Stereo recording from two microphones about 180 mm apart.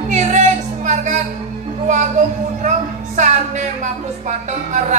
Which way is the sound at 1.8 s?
40° right (ahead or behind).